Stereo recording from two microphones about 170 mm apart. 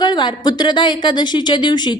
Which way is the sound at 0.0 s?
25° left (ahead or behind).